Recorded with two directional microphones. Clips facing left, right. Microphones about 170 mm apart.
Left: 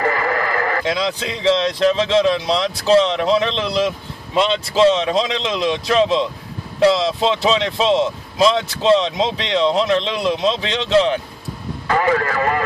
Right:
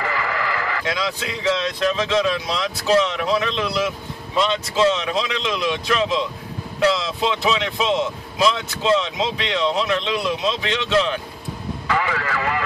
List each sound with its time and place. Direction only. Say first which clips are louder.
0.0 s sheep: left 5 dB; 45° left (ahead or behind)
0.9 s speech: left 4 dB; 30° left (ahead or behind)
11.9 s speech: left 6 dB; 45° left (ahead or behind)